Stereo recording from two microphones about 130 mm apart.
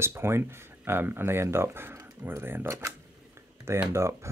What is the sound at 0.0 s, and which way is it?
Speech, 20° right (ahead or behind).